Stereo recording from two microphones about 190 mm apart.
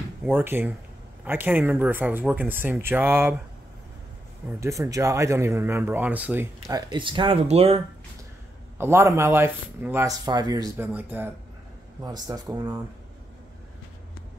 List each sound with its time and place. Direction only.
0.2 s speech: 10° right (ahead or behind)
4.5 s speech: 15° right (ahead or behind)
6.9 s speech: 25° right (ahead or behind)
8.7 s speech: 15° right (ahead or behind)
10.9 s speech: 10° right (ahead or behind)